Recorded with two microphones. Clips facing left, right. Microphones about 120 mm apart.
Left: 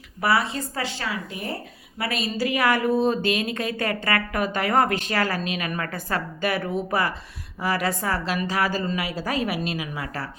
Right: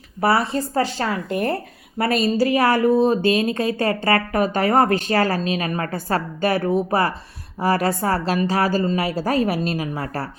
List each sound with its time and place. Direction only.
0.2 s speech: 40° right (ahead or behind); by 1.5 s 60° right (ahead or behind)
2.0 s speech: 40° right (ahead or behind)